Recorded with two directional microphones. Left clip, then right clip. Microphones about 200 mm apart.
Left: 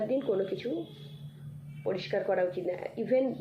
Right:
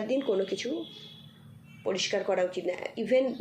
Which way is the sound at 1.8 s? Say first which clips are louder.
Right 2 dB; 40° right (ahead or behind).